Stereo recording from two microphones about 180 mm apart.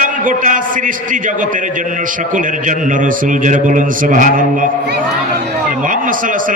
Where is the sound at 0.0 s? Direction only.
45° right (ahead or behind).